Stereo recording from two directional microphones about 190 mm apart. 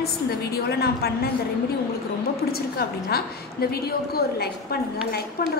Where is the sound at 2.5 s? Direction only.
55° left (ahead or behind).